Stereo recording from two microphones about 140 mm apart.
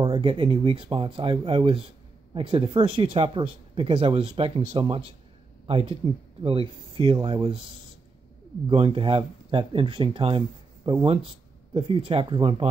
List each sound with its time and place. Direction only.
0.0 s speech: 40° right (ahead or behind)
7.0 s speech: 40° right (ahead or behind)
8.6 s speech: 40° right (ahead or behind)